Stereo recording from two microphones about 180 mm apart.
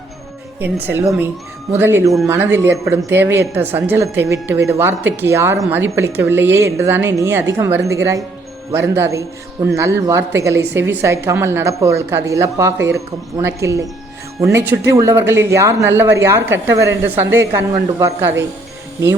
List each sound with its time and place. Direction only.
0.6 s speech: 10° right (ahead or behind)
18.2 s speech: 10° right (ahead or behind)